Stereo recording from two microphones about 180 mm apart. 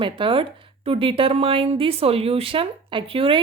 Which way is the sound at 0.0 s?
30° right (ahead or behind).